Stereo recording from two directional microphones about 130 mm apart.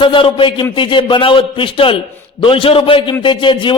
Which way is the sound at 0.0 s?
40° left (ahead or behind).